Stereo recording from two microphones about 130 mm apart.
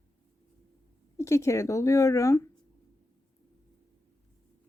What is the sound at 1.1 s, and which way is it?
Speech, 20° left (ahead or behind).